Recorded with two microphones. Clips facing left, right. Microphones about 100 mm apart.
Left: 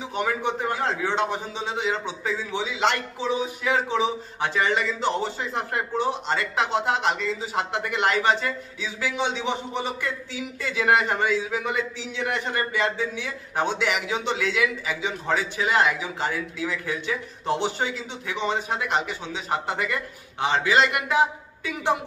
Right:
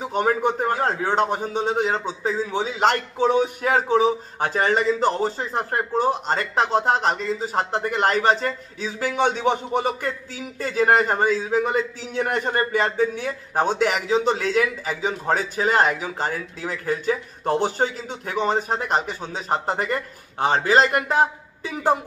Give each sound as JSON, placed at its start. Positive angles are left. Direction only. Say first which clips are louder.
{"t": 0.0, "sound": "a man's voice", "louder": "right 5 dB", "side_deg": -40}